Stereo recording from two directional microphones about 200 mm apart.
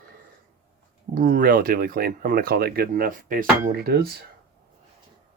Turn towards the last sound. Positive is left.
turn(degrees=-50)  # may be behind; listen again after turning